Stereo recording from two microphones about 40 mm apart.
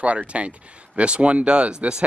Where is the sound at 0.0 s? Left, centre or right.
Right.